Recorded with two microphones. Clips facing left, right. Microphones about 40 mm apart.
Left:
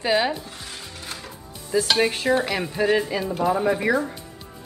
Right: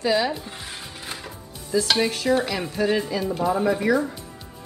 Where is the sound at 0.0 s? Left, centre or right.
Left.